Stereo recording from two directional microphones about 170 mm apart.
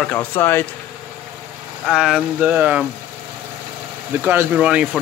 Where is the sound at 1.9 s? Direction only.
5° right (ahead or behind).